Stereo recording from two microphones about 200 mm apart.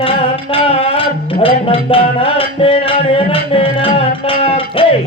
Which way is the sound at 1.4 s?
25° left (ahead or behind).